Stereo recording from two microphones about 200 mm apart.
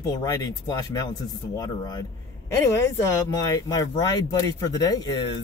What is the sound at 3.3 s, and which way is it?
Speech, 20° left (ahead or behind).